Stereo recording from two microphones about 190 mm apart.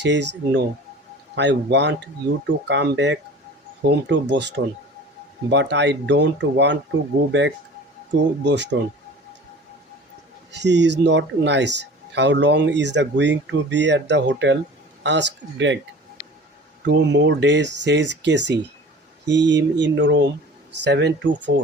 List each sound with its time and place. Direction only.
0.0 s speech: 65° right (ahead or behind)
10.5 s speech: 65° right (ahead or behind)
16.8 s speech: 65° right (ahead or behind)